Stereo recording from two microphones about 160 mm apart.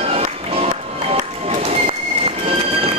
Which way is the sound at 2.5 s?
35° right (ahead or behind).